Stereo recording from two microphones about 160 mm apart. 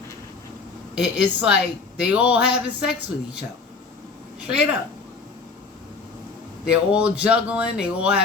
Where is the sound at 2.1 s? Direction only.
10° right (ahead or behind).